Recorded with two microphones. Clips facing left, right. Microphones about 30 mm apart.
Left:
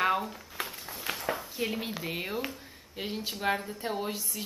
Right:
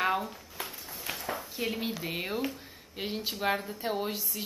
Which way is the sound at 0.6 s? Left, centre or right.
Centre.